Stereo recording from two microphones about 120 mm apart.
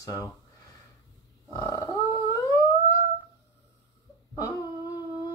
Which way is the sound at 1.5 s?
25° left (ahead or behind).